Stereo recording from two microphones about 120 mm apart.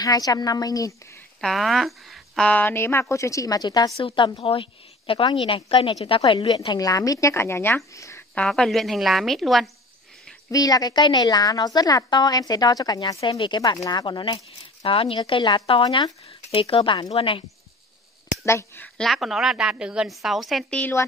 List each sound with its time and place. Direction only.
0.0 s a woman's voice: 30° left (ahead or behind)
1.4 s speech: centre (ahead or behind); by 3.9 s 35° left (ahead or behind)
3.9 s a woman's voice: 45° left (ahead or behind); by 8.2 s 25° left (ahead or behind)
8.4 s a woman's voice: 5° left (ahead or behind)
10.5 s a woman's voice: 30° left (ahead or behind)
13.3 s a woman's voice: 45° left (ahead or behind)
16.3 s a woman's voice: 55° left (ahead or behind)
18.4 s speech: 20° left (ahead or behind)
18.9 s a woman's voice: centre (ahead or behind)